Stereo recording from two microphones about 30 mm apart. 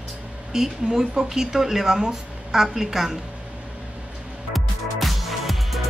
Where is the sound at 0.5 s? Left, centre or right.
Centre.